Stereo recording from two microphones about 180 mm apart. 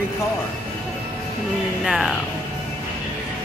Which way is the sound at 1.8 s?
Centre (ahead or behind).